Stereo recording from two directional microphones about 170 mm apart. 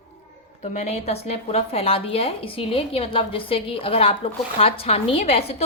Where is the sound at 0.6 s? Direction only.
40° left (ahead or behind).